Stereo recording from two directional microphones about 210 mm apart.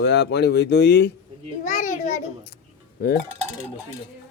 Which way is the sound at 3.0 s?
50° left (ahead or behind).